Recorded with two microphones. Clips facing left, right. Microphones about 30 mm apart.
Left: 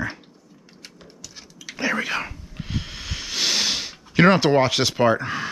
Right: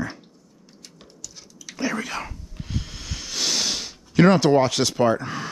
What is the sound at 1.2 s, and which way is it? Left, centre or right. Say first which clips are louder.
Whispering: left 2 dB; left.